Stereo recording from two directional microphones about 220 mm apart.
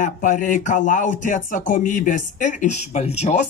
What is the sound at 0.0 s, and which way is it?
Speech, 35° left (ahead or behind).